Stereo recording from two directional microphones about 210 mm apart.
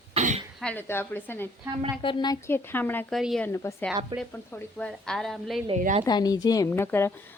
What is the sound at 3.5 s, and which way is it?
Speech, 15° left (ahead or behind).